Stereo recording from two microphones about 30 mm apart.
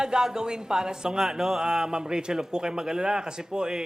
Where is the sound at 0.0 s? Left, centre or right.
Right.